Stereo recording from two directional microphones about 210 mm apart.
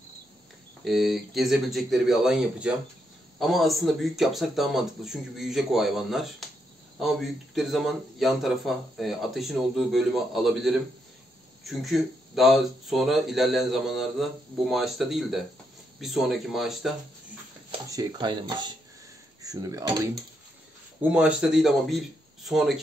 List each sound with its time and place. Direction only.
0.8 s a man's voice: centre (ahead or behind)
17.6 s speech: 20° right (ahead or behind)
21.0 s a man's voice: 5° right (ahead or behind)